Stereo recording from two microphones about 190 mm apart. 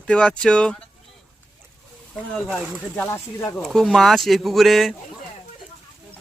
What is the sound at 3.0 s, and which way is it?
Speech, 15° left (ahead or behind).